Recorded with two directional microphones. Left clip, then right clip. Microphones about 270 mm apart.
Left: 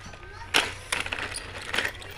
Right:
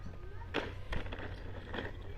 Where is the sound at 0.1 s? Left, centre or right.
Left.